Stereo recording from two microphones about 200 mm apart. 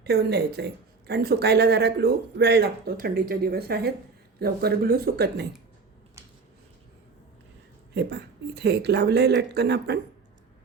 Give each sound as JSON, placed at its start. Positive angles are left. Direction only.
{"t": 0.0, "sound": "a woman's voice", "side_deg": -55}
{"t": 7.9, "sound": "speech", "side_deg": -55}